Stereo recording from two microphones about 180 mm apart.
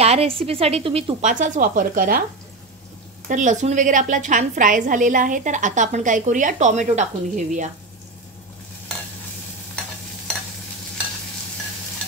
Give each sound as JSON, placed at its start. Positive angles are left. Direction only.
{"t": 0.0, "sound": "a woman's voice", "side_deg": -35}
{"t": 1.2, "sound": "a woman's voice", "side_deg": -45}
{"t": 3.3, "sound": "a woman's voice", "side_deg": -45}